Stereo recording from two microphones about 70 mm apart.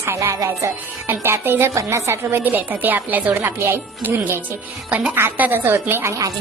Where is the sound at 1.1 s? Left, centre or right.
Right.